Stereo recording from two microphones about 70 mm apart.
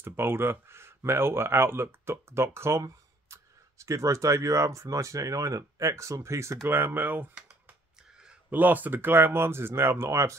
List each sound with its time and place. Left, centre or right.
0.0 s speech: right
3.3 s a sound: right
3.8 s speech: right
7.3 s computer keyboard: centre
8.5 s speech: right